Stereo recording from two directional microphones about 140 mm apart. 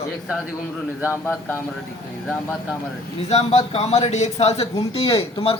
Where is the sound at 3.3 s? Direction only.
50° left (ahead or behind).